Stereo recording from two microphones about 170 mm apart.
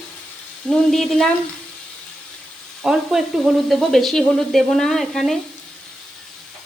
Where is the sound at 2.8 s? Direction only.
5° right (ahead or behind).